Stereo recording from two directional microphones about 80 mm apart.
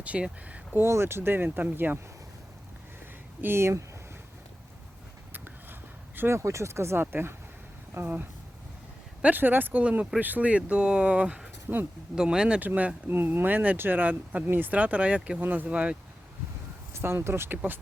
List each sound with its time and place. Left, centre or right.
0.0 s speech: centre
0.9 s speech: right
3.4 s speech: right
6.1 s speech: right; by 16.0 s centre
16.9 s speech: right